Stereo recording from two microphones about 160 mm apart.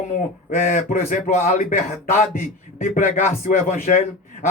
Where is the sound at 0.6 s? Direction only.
55° left (ahead or behind).